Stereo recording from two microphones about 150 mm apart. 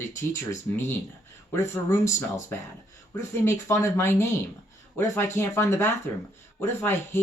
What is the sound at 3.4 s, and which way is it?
Speech, 15° left (ahead or behind).